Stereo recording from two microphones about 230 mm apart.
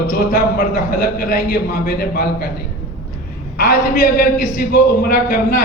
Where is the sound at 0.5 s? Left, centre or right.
Left.